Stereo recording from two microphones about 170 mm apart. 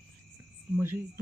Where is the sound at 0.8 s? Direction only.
15° right (ahead or behind).